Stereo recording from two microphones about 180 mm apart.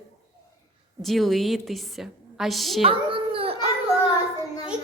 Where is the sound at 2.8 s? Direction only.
30° right (ahead or behind).